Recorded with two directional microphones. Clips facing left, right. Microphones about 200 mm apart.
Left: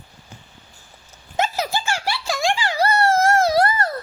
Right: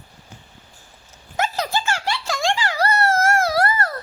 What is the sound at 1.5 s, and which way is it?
Giggle, 10° left (ahead or behind).